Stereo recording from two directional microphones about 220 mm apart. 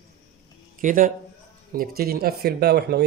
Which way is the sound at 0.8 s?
35° right (ahead or behind).